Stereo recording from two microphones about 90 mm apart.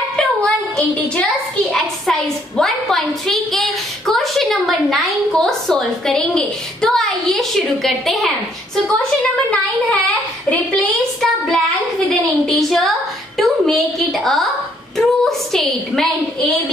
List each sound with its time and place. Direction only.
0.1 s a child's voice: 10° left (ahead or behind)
10.0 s a woman's voice: 15° left (ahead or behind)
11.1 s child singing: centre (ahead or behind)
12.4 s a child's voice: centre (ahead or behind)